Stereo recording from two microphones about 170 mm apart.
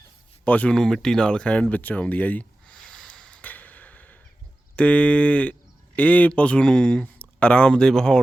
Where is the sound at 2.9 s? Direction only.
5° left (ahead or behind).